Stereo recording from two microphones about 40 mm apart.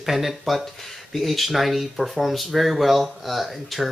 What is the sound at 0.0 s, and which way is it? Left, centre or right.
Speech, centre.